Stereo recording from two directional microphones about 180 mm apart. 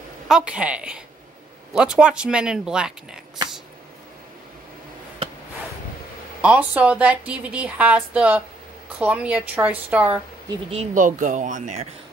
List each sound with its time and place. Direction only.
0.3 s speech: 5° right (ahead or behind)
6.4 s a woman's voice: 5° right (ahead or behind)
10.7 s speech: 40° right (ahead or behind)